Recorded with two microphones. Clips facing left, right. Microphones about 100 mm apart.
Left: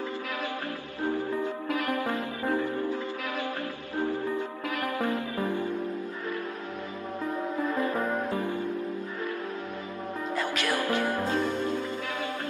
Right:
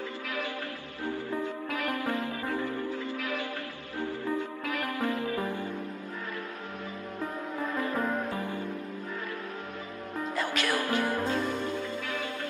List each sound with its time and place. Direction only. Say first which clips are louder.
1.9 s music: left 2 dB; 20° left (ahead or behind)
4.8 s music: left 2 dB; 25° left (ahead or behind)
8.4 s music: left 4 dB; 15° left (ahead or behind)
10.6 s music: left 1 dB; 20° left (ahead or behind)